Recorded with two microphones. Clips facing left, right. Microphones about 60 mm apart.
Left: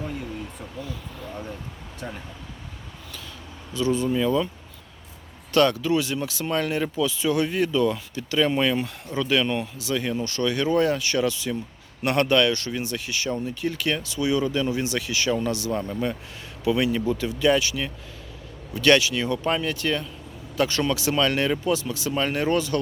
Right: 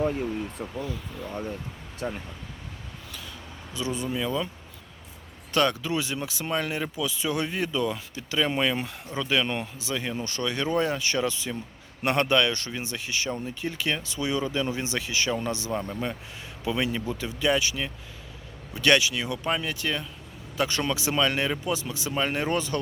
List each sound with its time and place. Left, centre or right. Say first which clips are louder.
0.0 s speech: right 5 dB; right
2.0 s speech: right 4 dB; centre
3.8 s speech: left 7 dB; centre
4.1 s speech: left 6 dB; centre
5.5 s speech: left 5 dB; centre
9.9 s speech: left 5 dB; centre
10.2 s speech: left 5 dB; right
15.7 s speech: left 3 dB; centre
16.6 s speech: left 6 dB; right